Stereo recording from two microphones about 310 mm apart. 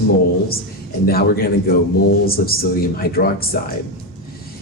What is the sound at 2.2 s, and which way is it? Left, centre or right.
Speech, left.